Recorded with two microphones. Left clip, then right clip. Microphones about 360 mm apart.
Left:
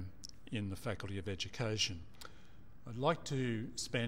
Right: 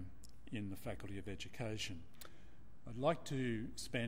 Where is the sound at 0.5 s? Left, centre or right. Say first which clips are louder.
Left 5 dB; left.